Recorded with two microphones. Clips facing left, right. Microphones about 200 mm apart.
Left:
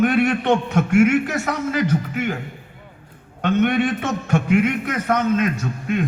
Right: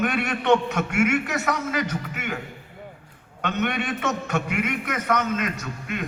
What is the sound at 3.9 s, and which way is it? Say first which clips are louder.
A man's voice: left 4 dB; 30° left (ahead or behind).